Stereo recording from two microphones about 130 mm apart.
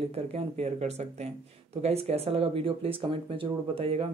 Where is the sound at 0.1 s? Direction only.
55° right (ahead or behind).